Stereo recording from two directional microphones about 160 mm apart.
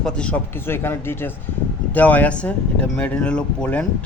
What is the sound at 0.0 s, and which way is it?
Speech, 5° left (ahead or behind).